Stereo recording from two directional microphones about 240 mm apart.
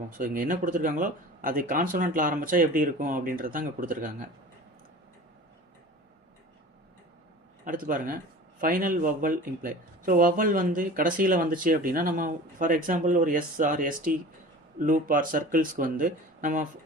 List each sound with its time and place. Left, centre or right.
0.2 s speech: right
7.6 s speech: right